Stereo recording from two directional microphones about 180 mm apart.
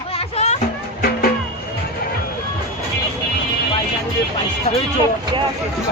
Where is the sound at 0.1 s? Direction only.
35° left (ahead or behind).